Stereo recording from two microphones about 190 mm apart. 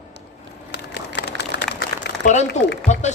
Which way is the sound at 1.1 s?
65° left (ahead or behind).